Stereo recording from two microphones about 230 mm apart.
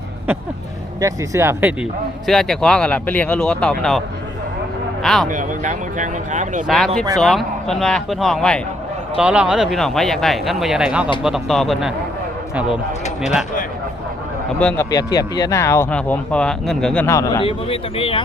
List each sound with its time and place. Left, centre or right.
1.0 s speech: centre
5.0 s speech: centre
5.3 s speech: right
6.7 s speech: centre
14.6 s speech: centre; by 18.2 s left